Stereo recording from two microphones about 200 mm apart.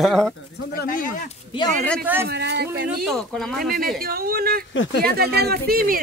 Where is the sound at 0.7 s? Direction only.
45° left (ahead or behind).